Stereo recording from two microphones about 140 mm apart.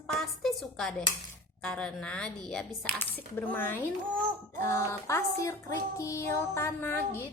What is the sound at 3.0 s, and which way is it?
Music, 15° left (ahead or behind).